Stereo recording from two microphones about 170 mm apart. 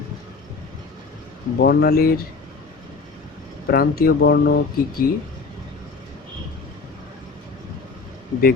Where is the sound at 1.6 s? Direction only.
65° left (ahead or behind).